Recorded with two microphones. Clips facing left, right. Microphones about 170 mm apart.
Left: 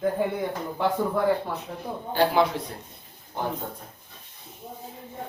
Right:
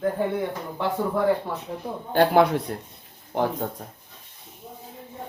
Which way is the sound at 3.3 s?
80° right.